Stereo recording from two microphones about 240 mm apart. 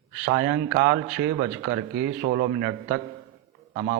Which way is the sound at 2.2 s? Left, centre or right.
Right.